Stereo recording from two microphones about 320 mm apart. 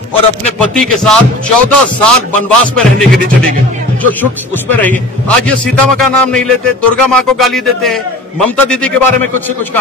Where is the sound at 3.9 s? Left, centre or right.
Centre.